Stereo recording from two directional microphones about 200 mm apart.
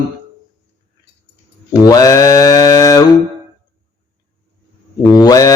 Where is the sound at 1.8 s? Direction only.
20° left (ahead or behind).